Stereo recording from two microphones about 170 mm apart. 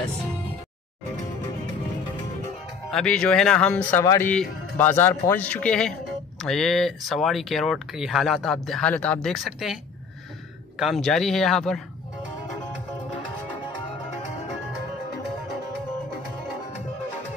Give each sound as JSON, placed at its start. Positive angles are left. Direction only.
{"t": 2.9, "sound": "speech", "side_deg": 5}
{"t": 4.0, "sound": "speech", "side_deg": 20}
{"t": 10.8, "sound": "speech", "side_deg": 0}